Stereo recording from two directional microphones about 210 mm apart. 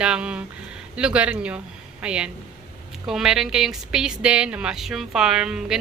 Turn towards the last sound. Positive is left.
turn(degrees=-5)  # may be behind; listen again after turning